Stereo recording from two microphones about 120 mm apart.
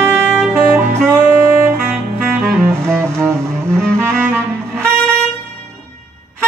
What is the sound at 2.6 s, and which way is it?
Saxophone, 20° right (ahead or behind).